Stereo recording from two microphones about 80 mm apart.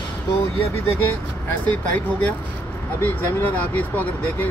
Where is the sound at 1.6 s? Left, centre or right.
Left.